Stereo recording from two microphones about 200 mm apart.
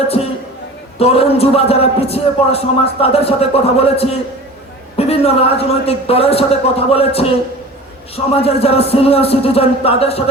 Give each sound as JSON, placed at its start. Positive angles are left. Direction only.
{"t": 0.9, "sound": "a man's voice", "side_deg": 30}